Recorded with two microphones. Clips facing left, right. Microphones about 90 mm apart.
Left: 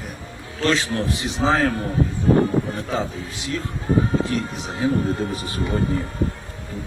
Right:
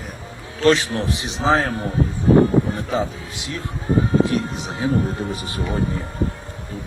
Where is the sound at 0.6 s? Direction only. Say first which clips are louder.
Right 4 dB; 20° right (ahead or behind).